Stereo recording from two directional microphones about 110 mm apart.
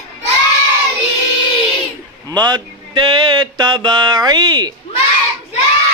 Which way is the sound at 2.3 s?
40° right (ahead or behind).